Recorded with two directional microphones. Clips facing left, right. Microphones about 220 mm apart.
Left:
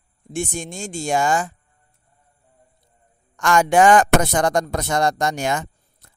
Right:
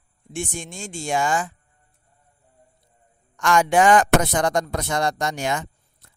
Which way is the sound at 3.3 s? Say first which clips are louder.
Left 2 dB; 45° left (ahead or behind).